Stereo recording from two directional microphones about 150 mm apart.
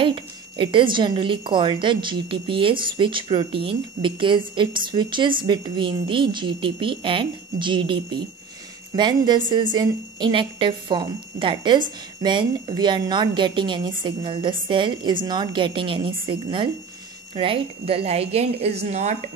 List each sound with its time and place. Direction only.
0.0 s a woman's voice: 35° right (ahead or behind); by 19.1 s 50° right (ahead or behind)